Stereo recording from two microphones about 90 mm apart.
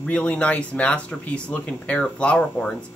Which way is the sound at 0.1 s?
10° left (ahead or behind).